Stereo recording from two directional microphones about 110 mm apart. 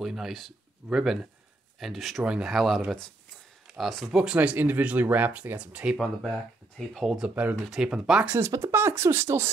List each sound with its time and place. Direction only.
0.0 s speech: centre (ahead or behind)
6.8 s speech: 5° left (ahead or behind)
7.2 s speech: 10° right (ahead or behind)
8.3 s speech: 25° right (ahead or behind)